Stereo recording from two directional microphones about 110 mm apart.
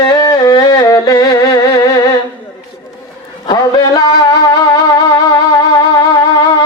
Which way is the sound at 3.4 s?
40° left (ahead or behind).